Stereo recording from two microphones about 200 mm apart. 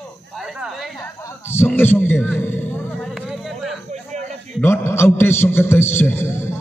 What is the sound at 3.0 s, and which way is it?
Music, centre (ahead or behind).